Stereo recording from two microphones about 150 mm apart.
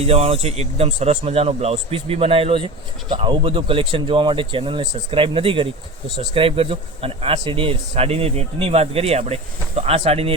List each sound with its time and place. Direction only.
0.0 s a man's voice: 45° right (ahead or behind)